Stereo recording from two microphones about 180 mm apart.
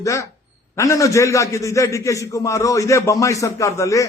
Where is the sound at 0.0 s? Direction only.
15° left (ahead or behind).